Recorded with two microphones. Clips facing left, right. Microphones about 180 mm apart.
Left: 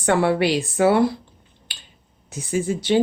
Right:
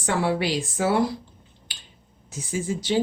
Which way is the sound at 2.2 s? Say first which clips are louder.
Left 5 dB; 65° left (ahead or behind).